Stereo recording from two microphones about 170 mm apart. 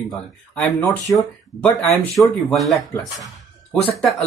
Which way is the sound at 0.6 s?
10° left (ahead or behind).